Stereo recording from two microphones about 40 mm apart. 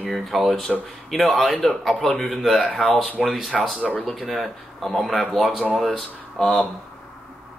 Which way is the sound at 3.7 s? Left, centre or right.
Left.